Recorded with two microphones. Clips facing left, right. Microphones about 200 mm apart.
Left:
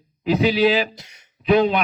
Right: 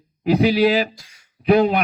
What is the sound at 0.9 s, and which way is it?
Speech, 20° left (ahead or behind).